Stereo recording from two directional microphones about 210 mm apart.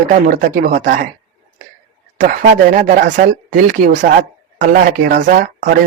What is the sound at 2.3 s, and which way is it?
Speech, 40° right (ahead or behind).